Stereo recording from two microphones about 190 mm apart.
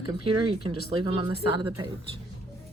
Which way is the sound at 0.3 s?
25° right (ahead or behind).